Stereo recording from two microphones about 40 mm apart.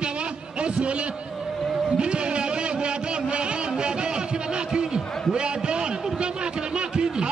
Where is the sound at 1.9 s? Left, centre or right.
Right.